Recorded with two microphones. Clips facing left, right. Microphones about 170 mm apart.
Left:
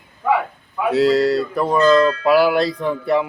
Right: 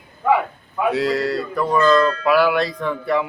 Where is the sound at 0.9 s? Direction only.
35° left (ahead or behind).